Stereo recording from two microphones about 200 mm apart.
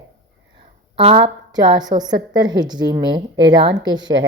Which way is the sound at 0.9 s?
25° right (ahead or behind).